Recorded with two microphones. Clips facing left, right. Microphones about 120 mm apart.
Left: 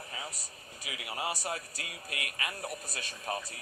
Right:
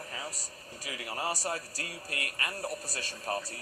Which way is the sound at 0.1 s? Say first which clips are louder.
Right 2 dB; 35° right (ahead or behind).